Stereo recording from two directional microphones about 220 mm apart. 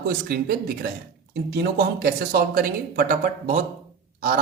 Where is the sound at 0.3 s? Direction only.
45° right (ahead or behind).